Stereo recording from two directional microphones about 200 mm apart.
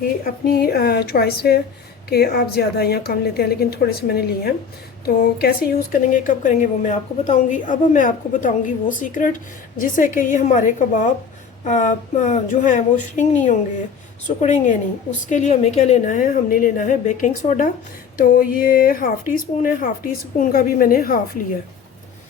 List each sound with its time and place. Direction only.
0.4 s a woman's voice: 50° left (ahead or behind)